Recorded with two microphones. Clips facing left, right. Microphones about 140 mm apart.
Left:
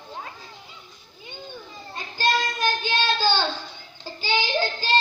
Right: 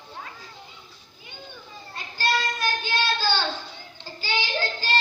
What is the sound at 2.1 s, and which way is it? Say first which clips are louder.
Child singing: left 2 dB; 20° left (ahead or behind).